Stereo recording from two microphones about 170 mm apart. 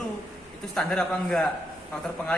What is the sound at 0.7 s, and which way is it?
Speech, 5° left (ahead or behind).